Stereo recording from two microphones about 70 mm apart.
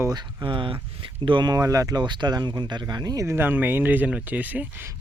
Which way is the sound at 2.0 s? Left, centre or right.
Right.